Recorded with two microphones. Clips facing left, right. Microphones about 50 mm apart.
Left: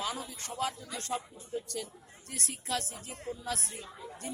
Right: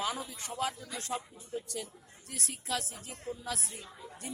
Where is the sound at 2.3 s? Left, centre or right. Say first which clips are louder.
Left 1 dB; centre.